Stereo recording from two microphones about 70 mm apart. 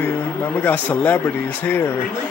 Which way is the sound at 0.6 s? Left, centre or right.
Left.